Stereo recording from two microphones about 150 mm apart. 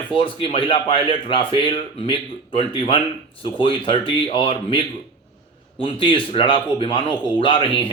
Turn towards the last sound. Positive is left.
turn(degrees=35)  # may be behind; listen again after turning